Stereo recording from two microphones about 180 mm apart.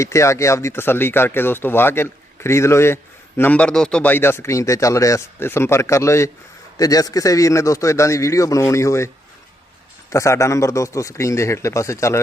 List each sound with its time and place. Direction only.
0.0 s speech: 15° left (ahead or behind)
10.1 s speech: 15° left (ahead or behind)